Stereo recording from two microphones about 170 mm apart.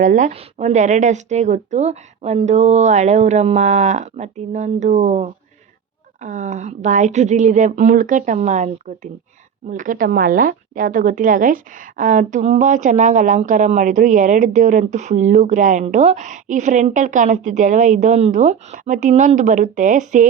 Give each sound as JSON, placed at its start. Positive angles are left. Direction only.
{"t": 0.0, "sound": "a woman's voice", "side_deg": -50}
{"t": 9.7, "sound": "a woman's voice", "side_deg": -50}